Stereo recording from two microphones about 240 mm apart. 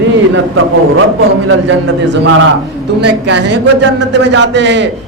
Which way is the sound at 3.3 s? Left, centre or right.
Right.